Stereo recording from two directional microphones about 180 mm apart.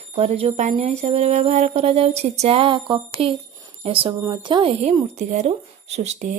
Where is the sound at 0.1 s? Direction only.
35° right (ahead or behind).